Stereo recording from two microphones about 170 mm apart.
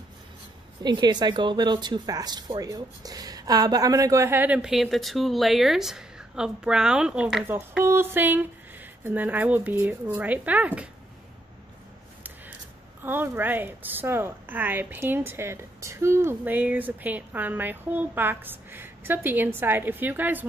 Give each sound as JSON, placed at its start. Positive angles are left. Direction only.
{"t": 0.8, "sound": "a woman's voice", "side_deg": -25}
{"t": 13.0, "sound": "a woman's voice", "side_deg": -10}